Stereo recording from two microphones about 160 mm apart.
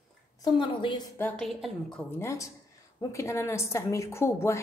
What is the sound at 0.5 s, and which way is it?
Speech, 30° left (ahead or behind).